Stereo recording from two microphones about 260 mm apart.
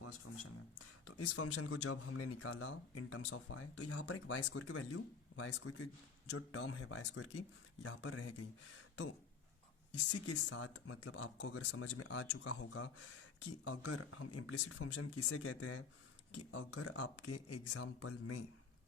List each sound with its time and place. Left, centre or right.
0.8 s speech: left
10.3 s speech: left